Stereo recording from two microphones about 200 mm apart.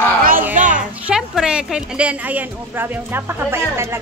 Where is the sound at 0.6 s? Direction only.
40° right (ahead or behind).